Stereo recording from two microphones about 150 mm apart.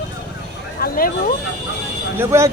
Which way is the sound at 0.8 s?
75° left (ahead or behind).